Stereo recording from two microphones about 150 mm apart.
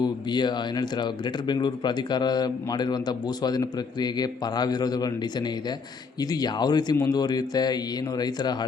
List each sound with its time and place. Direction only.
0.0 s a man's voice: 30° left (ahead or behind)